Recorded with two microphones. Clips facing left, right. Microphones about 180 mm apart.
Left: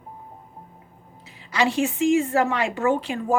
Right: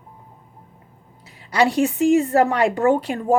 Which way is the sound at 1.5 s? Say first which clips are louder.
Right 4 dB; 35° right (ahead or behind).